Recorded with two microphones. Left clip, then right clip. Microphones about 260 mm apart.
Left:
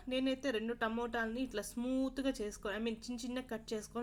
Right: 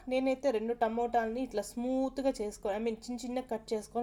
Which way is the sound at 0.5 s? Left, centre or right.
Right.